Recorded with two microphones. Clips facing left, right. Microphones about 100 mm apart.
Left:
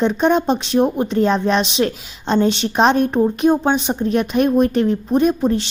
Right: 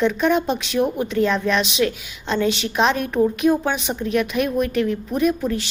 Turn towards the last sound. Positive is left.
turn(degrees=30)  # may be behind; listen again after turning